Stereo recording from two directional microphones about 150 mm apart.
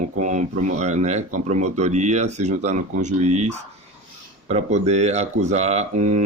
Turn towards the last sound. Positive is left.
turn(degrees=-50)  # may be behind; listen again after turning